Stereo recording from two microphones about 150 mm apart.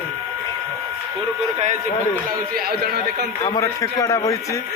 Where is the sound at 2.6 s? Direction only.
90° right.